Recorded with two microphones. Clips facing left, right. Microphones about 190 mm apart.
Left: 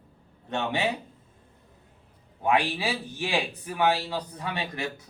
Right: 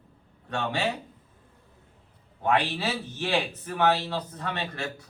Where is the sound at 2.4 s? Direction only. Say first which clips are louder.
Left 1 dB; 10° left (ahead or behind).